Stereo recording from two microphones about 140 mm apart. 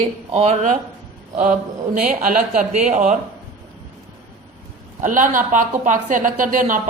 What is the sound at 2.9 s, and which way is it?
Speech, 60° right (ahead or behind).